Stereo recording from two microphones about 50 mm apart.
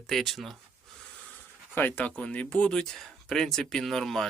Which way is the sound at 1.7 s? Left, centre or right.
Left.